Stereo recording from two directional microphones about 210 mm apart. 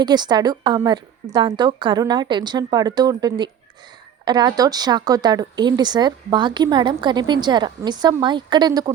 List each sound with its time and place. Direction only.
0.0 s speech: 20° right (ahead or behind)